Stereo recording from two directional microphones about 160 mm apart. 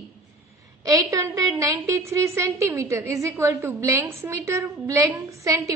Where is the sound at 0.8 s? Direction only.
20° right (ahead or behind).